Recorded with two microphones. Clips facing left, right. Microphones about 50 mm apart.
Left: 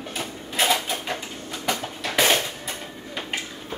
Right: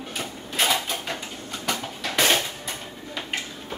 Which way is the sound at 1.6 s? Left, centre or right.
Centre.